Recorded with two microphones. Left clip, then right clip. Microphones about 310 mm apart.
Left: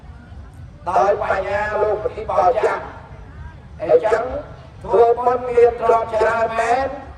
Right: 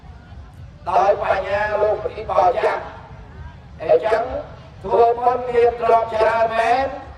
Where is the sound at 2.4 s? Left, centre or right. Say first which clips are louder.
Left 1 dB; right.